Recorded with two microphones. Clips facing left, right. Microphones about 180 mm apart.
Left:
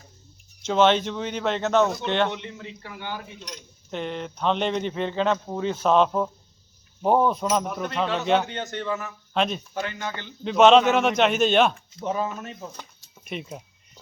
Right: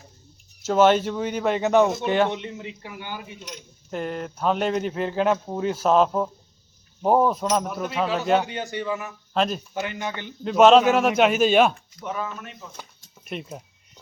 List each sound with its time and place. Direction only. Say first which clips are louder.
0.6 s speech: right 2 dB; 5° right (ahead or behind)
2.0 s speech: right 3 dB; 5° right (ahead or behind)
2.3 s speech: right 3 dB; 20° right (ahead or behind)
9.3 s speech: right 1 dB; centre (ahead or behind)
9.7 s speech: right 1 dB; 15° right (ahead or behind)
10.4 s speech: right 1 dB; 5° right (ahead or behind)
11.9 s speech: left 4 dB; 30° left (ahead or behind)
13.2 s a sound: even; centre (ahead or behind)